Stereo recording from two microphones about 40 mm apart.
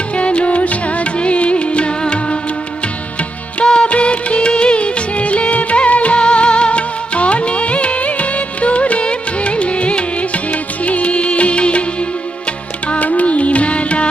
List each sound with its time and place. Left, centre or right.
0.2 s music: left
3.6 s music: left
12.9 s music: left